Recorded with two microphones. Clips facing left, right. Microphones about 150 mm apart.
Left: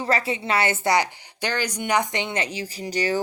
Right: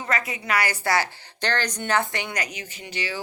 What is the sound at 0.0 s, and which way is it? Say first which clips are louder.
A woman's voice: left 4 dB; 30° left (ahead or behind).